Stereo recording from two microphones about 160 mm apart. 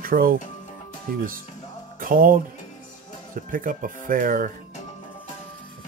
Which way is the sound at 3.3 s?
60° right (ahead or behind).